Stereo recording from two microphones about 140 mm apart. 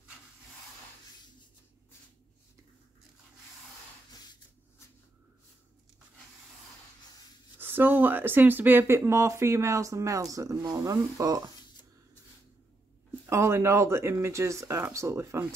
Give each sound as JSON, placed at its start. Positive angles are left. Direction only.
{"t": 4.1, "sound": "a sound", "side_deg": 30}
{"t": 7.5, "sound": "speech", "side_deg": -15}
{"t": 13.3, "sound": "speech", "side_deg": -20}